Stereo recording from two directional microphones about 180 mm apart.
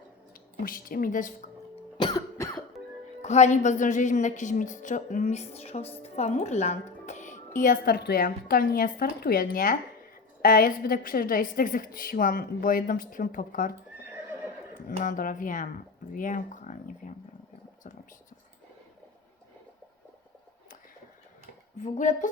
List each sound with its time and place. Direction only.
0.6 s speech: 50° left (ahead or behind)
1.7 s cough: 25° left (ahead or behind)
3.2 s a woman's voice: 40° left (ahead or behind)
7.9 s speech: 60° left (ahead or behind)
15.0 s speech: 50° left (ahead or behind)
21.8 s speech: 45° left (ahead or behind)